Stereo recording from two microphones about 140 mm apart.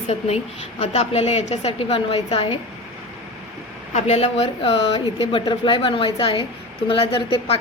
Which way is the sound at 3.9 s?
50° left (ahead or behind).